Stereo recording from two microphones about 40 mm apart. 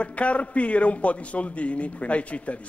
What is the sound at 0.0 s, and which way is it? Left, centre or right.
A man's voice, left.